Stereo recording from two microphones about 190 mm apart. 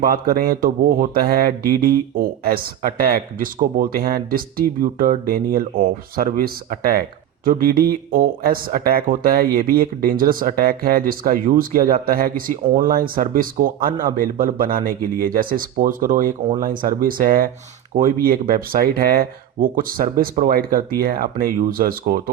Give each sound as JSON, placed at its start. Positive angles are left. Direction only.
{"t": 0.0, "sound": "speech", "side_deg": -50}